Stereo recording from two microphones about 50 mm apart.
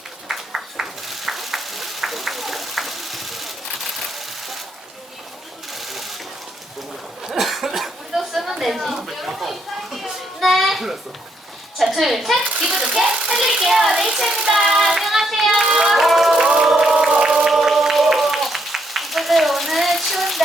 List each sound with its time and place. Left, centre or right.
0.3 s a sound: centre
4.1 s sewing machine: centre
5.7 s sewing machine: centre
7.3 s cough: centre
7.8 s a sound: centre
11.8 s a woman's voice: centre
12.5 s a child's voice: centre
13.3 s speech: centre
16.4 s music: centre
17.2 s a sound: centre